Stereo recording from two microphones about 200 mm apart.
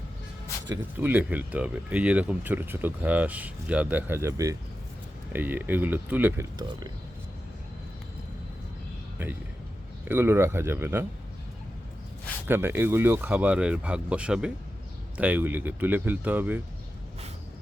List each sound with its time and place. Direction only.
0.9 s speech: 10° right (ahead or behind)
6.6 s speech: 20° right (ahead or behind)
10.1 s speech: 10° right (ahead or behind)
12.5 s speech: 10° right (ahead or behind)